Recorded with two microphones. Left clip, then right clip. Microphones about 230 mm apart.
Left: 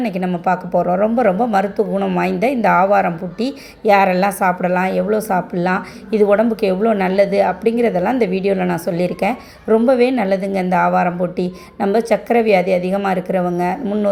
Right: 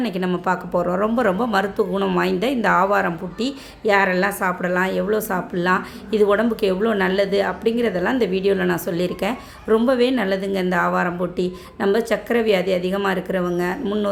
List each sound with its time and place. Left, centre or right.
0.0 s a woman's voice: centre